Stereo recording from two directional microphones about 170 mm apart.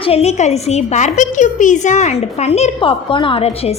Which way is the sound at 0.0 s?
35° left (ahead or behind).